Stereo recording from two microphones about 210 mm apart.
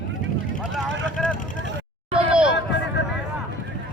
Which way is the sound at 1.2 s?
Centre (ahead or behind).